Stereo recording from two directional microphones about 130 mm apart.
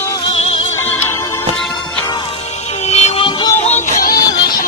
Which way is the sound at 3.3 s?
40° left (ahead or behind).